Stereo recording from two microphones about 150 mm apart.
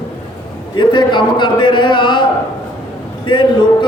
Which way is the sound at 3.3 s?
30° left (ahead or behind).